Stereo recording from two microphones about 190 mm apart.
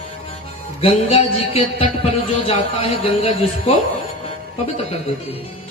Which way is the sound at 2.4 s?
30° left (ahead or behind).